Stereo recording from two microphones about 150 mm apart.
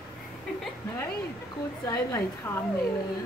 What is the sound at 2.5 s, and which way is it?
Speech, 15° left (ahead or behind).